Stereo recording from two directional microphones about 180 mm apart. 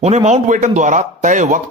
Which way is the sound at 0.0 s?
35° right (ahead or behind).